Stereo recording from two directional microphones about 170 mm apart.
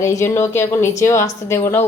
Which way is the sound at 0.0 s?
15° left (ahead or behind).